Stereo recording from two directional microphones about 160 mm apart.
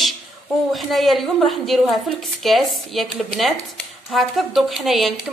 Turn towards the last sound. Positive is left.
turn(degrees=0)  # may be behind; listen again after turning